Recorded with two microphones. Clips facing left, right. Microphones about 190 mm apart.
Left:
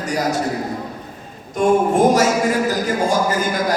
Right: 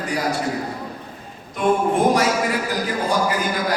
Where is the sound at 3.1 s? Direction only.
45° left (ahead or behind).